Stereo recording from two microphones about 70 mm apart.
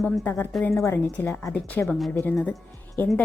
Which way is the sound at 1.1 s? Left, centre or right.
Left.